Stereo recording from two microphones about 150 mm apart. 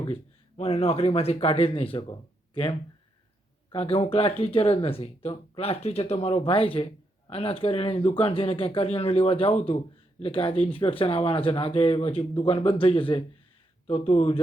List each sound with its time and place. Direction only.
0.0 s speech: 40° left (ahead or behind)
3.7 s speech: 40° left (ahead or behind)